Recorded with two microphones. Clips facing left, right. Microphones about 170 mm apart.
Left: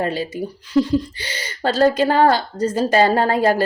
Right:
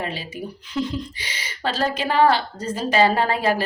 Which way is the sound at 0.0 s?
45° left (ahead or behind).